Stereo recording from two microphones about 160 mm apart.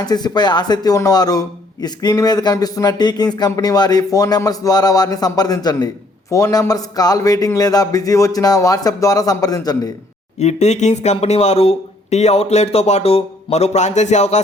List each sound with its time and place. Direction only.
0.0 s speech: 25° left (ahead or behind)
10.3 s speech: 45° left (ahead or behind)